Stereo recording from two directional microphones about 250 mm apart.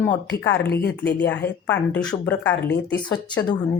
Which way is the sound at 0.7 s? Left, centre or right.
Left.